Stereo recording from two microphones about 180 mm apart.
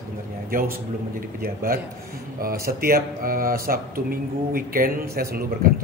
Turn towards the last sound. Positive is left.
turn(degrees=-55)  # may be behind; listen again after turning